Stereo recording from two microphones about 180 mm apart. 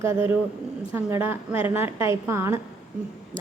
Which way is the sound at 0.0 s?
15° right (ahead or behind).